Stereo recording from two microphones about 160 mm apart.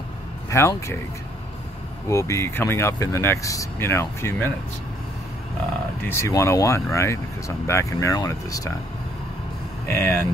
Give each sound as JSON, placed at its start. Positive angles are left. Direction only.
{"t": 0.5, "sound": "speech", "side_deg": 20}
{"t": 2.0, "sound": "speech", "side_deg": 20}
{"t": 6.0, "sound": "speech", "side_deg": 15}
{"t": 9.8, "sound": "speech", "side_deg": 15}